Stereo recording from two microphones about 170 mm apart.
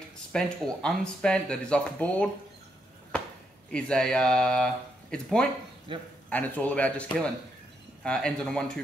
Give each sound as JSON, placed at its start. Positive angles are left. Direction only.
{"t": 0.3, "sound": "speech", "side_deg": 5}
{"t": 3.7, "sound": "speech", "side_deg": 5}
{"t": 5.9, "sound": "speech", "side_deg": -30}
{"t": 6.3, "sound": "speech", "side_deg": 10}